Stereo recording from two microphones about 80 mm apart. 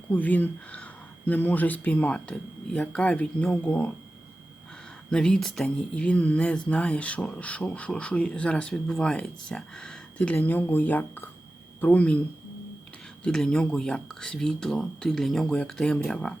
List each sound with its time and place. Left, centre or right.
0.1 s speech: centre
5.1 s speech: centre
10.3 s speech: left
13.2 s speech: centre